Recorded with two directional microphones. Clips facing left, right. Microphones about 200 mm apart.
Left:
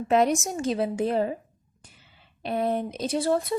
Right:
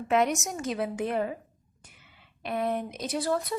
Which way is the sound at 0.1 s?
35° left (ahead or behind).